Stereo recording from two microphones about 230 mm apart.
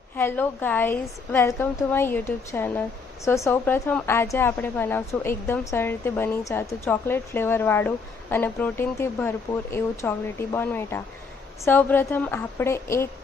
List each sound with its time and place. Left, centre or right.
0.2 s a woman's voice: centre